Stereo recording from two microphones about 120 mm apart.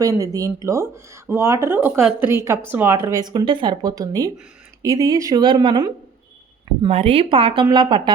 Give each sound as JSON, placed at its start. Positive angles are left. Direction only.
{"t": 0.0, "sound": "speech", "side_deg": -30}
{"t": 3.2, "sound": "speech", "side_deg": -35}
{"t": 6.8, "sound": "speech", "side_deg": -55}
{"t": 7.6, "sound": "speech", "side_deg": -40}